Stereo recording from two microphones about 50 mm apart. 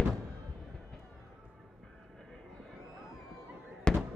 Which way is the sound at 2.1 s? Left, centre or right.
Centre.